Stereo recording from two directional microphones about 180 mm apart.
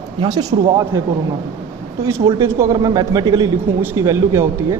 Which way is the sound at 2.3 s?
15° right (ahead or behind).